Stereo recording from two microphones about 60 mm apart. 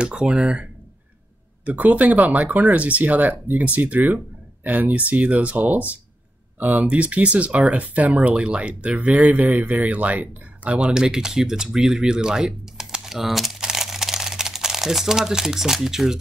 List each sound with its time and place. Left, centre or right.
0.0 s speech: centre